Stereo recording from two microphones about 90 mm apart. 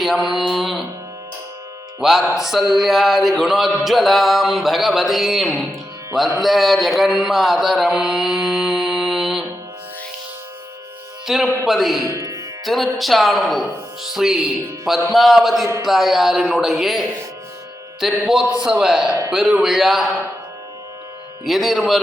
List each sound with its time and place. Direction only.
0.0 s speech: centre (ahead or behind)
2.0 s speech: 5° right (ahead or behind)
6.4 s carnatic music: centre (ahead or behind)
11.3 s speech: 5° right (ahead or behind)
12.0 s music: 40° right (ahead or behind)
12.6 s speech: centre (ahead or behind)
21.4 s speech: centre (ahead or behind)